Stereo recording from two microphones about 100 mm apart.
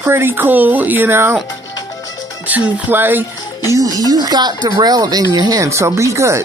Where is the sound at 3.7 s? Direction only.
35° right (ahead or behind).